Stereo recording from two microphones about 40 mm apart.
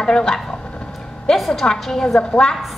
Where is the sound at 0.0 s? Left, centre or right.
Centre.